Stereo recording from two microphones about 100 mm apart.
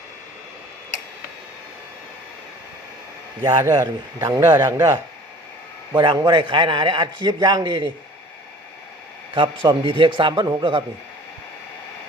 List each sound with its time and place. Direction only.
3.4 s a man's voice: 40° right (ahead or behind)
9.3 s a man's voice: 55° right (ahead or behind)